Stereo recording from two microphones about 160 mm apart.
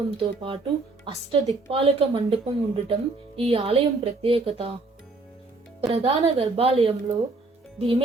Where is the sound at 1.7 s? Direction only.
35° right (ahead or behind).